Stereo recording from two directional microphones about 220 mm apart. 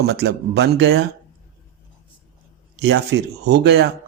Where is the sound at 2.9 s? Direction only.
50° right (ahead or behind).